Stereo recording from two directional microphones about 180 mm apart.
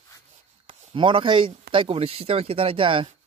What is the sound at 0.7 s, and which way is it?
Speech, 30° right (ahead or behind).